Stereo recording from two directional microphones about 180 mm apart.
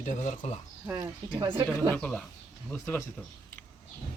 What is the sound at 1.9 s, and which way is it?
Speech, 5° left (ahead or behind).